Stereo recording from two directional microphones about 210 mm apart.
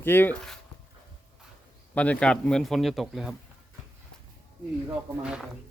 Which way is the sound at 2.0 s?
5° left (ahead or behind).